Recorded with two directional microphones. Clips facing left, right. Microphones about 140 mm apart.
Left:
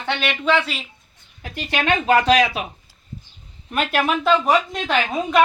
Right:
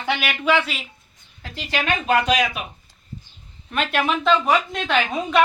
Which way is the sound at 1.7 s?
20° left (ahead or behind).